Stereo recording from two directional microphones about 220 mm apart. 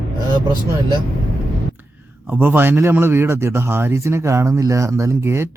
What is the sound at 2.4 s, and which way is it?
A man's voice, 10° right (ahead or behind).